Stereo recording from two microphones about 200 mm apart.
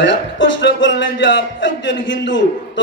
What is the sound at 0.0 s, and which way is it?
Speech, 60° left (ahead or behind).